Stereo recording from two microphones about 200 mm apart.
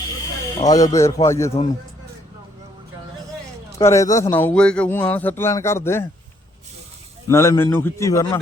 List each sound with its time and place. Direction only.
0.6 s a man's voice: 15° left (ahead or behind)
3.8 s a man's voice: 15° left (ahead or behind)
7.3 s a man's voice: 15° left (ahead or behind)